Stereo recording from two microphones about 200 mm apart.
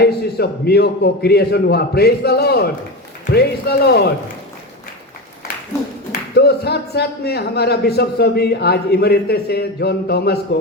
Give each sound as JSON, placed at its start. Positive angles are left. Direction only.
{"t": 0.0, "sound": "a man's voice", "side_deg": 55}
{"t": 6.1, "sound": "a man's voice", "side_deg": 55}